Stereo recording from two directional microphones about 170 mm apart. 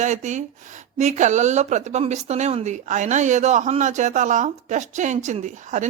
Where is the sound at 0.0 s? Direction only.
45° right (ahead or behind).